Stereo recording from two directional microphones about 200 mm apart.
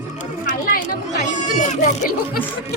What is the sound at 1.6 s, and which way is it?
Speech, 40° left (ahead or behind).